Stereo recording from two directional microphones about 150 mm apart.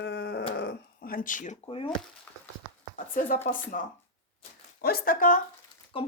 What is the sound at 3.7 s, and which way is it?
Speech, 60° left (ahead or behind).